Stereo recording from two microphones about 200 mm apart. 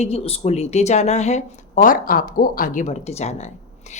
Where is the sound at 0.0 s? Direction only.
30° left (ahead or behind).